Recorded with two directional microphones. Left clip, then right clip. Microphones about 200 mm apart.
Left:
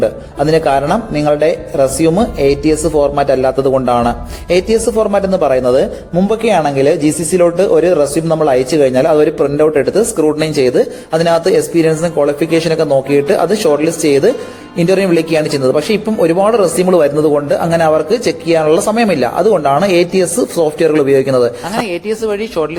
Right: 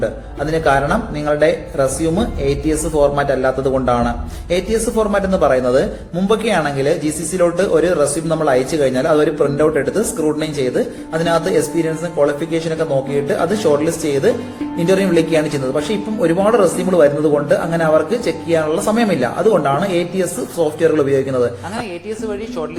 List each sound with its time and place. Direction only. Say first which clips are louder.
0.0 s speech: left 7 dB; 40° left (ahead or behind)